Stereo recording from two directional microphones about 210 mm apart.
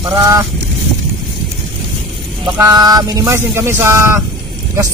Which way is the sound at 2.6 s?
15° right (ahead or behind).